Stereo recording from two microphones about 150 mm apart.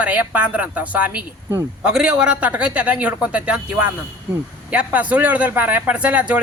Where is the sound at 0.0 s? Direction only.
10° right (ahead or behind).